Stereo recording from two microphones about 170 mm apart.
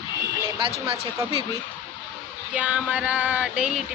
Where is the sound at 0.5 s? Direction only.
30° right (ahead or behind).